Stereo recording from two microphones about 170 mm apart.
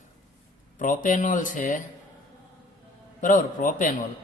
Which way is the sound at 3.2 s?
50° left (ahead or behind).